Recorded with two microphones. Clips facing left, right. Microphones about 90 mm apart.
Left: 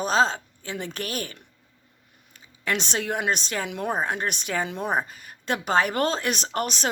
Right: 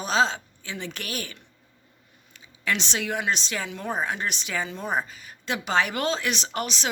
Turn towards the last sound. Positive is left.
turn(degrees=45)  # may be behind; listen again after turning